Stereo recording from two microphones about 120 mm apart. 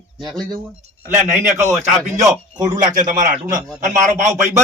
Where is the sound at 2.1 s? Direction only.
35° right (ahead or behind).